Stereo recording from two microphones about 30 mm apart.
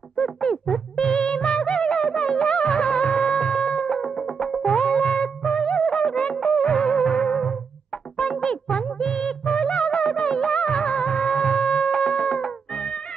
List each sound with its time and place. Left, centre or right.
0.2 s music of bollywood: left
4.6 s music: left
8.7 s music of bollywood: left